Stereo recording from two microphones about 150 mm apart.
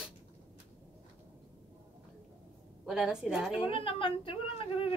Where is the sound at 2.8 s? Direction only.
5° right (ahead or behind).